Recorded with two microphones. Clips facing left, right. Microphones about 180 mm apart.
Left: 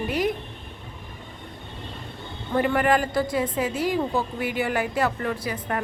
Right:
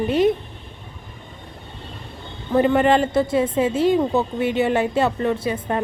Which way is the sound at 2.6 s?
25° right (ahead or behind).